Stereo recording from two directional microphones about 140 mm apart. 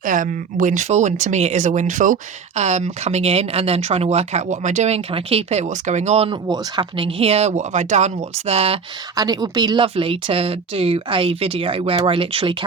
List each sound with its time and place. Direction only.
0.0 s speech: 70° right (ahead or behind)
2.6 s speech: 55° right (ahead or behind)
9.1 s speech: 30° right (ahead or behind)